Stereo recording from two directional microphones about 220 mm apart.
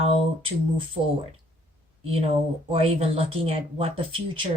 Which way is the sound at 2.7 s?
25° right (ahead or behind).